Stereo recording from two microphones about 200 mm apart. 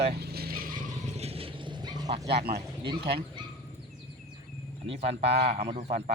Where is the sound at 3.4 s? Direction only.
20° right (ahead or behind).